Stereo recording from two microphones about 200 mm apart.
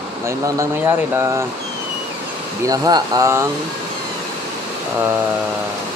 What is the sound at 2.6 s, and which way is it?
Speech, 20° right (ahead or behind).